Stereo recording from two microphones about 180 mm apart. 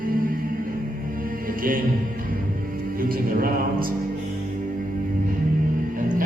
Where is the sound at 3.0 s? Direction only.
55° right (ahead or behind).